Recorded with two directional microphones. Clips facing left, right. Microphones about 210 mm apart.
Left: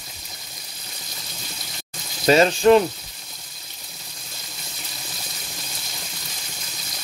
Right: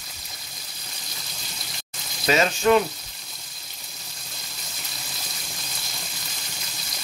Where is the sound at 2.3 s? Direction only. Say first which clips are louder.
Left 5 dB; 30° left (ahead or behind).